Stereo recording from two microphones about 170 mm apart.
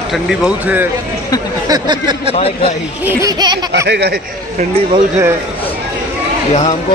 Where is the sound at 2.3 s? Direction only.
40° left (ahead or behind).